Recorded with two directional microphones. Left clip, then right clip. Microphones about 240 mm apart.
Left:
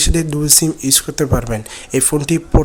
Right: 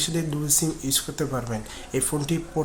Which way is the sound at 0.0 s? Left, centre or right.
Left.